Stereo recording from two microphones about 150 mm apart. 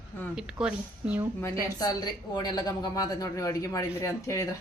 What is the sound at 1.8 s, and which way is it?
A woman's voice, 25° left (ahead or behind).